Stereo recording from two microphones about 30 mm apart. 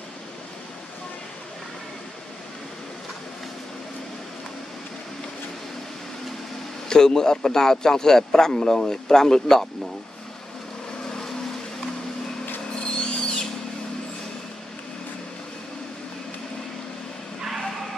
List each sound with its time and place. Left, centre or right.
6.9 s a man's voice: left
12.8 s owl: left
17.4 s a sound: centre